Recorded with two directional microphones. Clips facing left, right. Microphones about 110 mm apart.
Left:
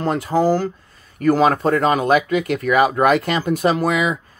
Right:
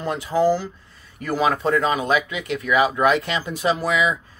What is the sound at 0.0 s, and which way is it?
Speech, 45° left (ahead or behind).